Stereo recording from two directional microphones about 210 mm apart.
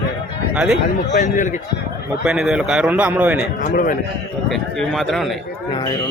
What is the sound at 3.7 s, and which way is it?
Speech, 40° left (ahead or behind).